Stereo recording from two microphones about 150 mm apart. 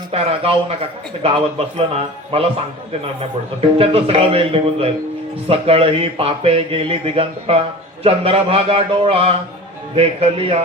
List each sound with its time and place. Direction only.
0.1 s a man's voice: 40° right (ahead or behind)
3.2 s a man's voice: 40° right (ahead or behind)